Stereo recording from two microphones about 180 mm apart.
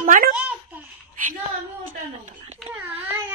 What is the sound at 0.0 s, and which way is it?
Babbling, 50° right (ahead or behind).